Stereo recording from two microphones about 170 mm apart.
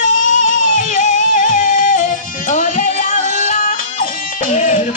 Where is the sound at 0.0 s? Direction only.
50° left (ahead or behind).